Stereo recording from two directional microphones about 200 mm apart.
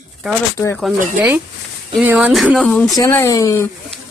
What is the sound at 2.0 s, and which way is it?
Speech, 5° right (ahead or behind).